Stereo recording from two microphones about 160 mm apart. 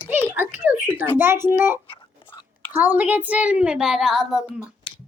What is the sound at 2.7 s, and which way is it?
A child's voice, 10° right (ahead or behind).